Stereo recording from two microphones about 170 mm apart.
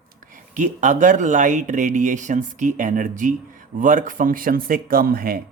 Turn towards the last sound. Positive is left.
turn(degrees=-60)  # may be behind; listen again after turning